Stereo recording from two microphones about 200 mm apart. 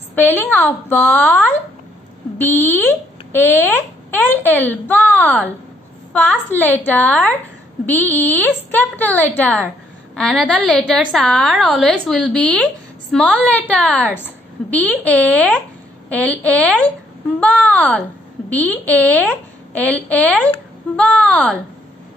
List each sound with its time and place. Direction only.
0.1 s a woman's voice: 10° left (ahead or behind)